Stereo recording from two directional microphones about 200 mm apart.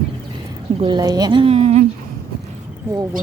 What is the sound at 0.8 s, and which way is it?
Speech, 20° right (ahead or behind).